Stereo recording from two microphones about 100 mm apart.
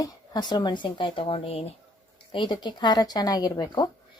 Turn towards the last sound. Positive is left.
turn(degrees=40)  # may be behind; listen again after turning